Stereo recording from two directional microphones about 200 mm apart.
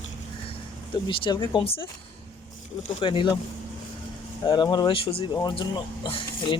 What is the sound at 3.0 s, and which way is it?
Speech, 25° left (ahead or behind).